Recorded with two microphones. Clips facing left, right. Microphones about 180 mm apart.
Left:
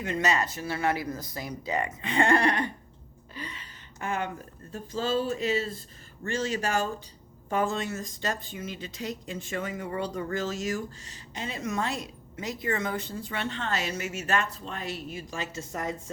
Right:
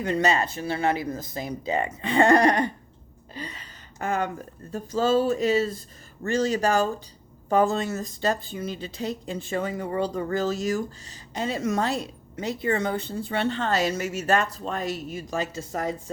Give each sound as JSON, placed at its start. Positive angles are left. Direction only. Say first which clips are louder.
{"t": 0.0, "sound": "speech", "louder": "right 4 dB", "side_deg": -35}